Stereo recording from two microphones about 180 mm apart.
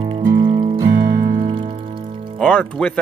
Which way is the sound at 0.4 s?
30° right (ahead or behind).